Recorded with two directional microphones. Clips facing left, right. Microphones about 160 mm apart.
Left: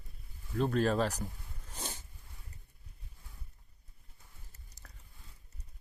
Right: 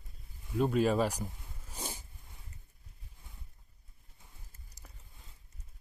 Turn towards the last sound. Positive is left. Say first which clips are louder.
# right 1 dB
turn(degrees=-10)  # may be behind; listen again after turning